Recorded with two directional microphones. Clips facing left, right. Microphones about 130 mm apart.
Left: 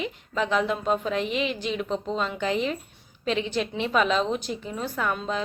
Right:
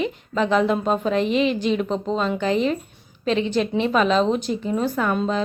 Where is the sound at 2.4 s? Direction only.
10° left (ahead or behind).